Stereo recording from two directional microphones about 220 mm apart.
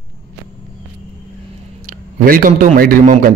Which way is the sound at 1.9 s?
40° right (ahead or behind).